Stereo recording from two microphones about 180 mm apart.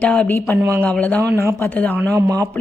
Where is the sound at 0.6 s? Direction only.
15° right (ahead or behind).